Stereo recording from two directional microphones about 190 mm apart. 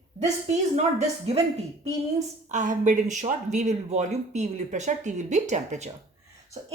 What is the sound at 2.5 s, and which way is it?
Speech, 40° right (ahead or behind).